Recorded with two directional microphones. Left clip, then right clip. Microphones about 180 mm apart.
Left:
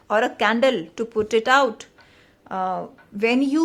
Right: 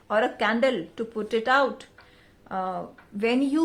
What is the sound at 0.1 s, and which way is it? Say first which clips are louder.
A woman's voice: left 4 dB; 25° left (ahead or behind).